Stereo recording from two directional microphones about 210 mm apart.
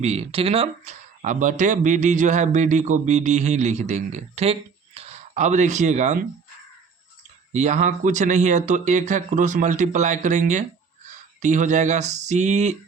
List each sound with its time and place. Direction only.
0.0 s speech: 30° right (ahead or behind)
7.5 s speech: 35° right (ahead or behind)